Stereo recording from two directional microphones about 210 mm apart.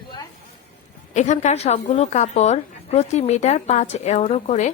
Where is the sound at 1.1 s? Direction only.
35° left (ahead or behind).